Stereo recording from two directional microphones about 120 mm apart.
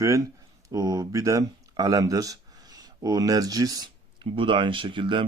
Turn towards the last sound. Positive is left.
turn(degrees=-45)  # may be behind; listen again after turning